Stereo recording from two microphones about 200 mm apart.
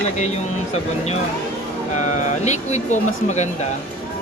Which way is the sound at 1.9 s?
35° left (ahead or behind).